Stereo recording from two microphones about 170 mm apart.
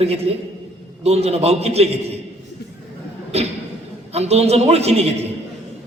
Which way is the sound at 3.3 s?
40° right (ahead or behind).